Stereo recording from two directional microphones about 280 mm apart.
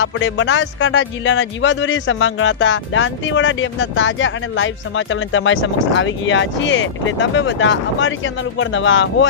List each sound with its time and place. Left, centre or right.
0.0 s speech: left